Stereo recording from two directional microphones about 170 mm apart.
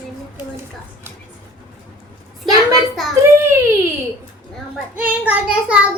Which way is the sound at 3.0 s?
Centre (ahead or behind).